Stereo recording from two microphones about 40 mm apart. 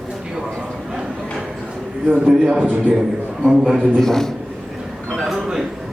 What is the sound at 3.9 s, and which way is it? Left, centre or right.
Speech, centre.